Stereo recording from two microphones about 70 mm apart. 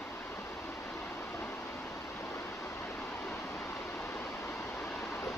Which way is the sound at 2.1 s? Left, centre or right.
Left.